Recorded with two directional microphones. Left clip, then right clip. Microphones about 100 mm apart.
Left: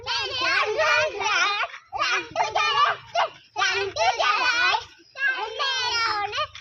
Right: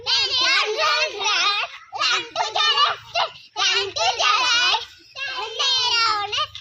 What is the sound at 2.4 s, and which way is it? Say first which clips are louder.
Fowl: right 2 dB; 10° left (ahead or behind).